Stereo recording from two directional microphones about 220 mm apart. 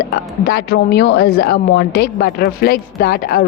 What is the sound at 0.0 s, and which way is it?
Speech, 45° left (ahead or behind).